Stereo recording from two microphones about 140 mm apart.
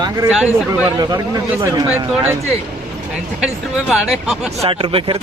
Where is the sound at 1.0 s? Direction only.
25° right (ahead or behind).